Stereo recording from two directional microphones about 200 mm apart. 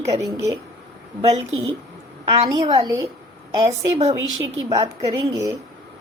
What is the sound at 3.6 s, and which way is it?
Speech, 30° right (ahead or behind).